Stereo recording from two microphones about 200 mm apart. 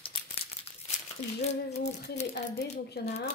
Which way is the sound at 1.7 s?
35° left (ahead or behind).